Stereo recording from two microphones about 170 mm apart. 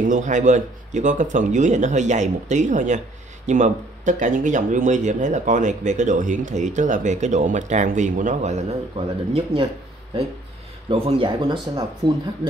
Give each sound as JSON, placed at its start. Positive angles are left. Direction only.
{"t": 0.0, "sound": "speech", "side_deg": -45}
{"t": 10.9, "sound": "speech", "side_deg": -30}